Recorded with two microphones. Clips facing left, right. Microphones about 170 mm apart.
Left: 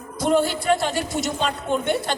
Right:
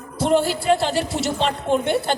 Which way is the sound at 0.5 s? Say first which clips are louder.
Right 2 dB; 30° right (ahead or behind).